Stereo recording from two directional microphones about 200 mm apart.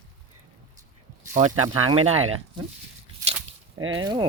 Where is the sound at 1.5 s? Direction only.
90° right.